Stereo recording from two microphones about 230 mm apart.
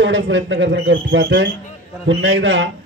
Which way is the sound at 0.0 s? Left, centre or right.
Right.